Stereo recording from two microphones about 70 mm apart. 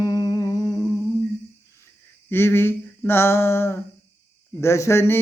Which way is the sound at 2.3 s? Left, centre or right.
Left.